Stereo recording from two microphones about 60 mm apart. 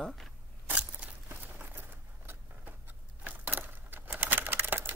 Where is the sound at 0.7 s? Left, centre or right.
Right.